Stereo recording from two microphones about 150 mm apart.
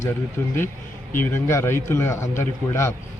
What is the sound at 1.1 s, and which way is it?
A man's voice, 15° left (ahead or behind).